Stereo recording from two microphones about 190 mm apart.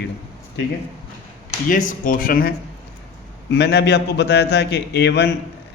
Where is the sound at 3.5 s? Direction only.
60° left (ahead or behind).